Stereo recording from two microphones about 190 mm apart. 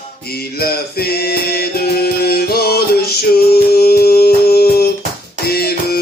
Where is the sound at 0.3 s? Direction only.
55° left (ahead or behind).